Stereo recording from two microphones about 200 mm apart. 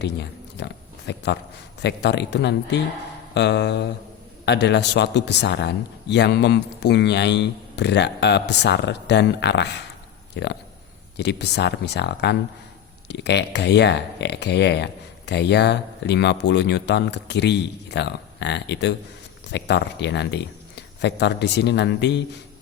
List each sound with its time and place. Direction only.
0.0 s speech: 60° left (ahead or behind)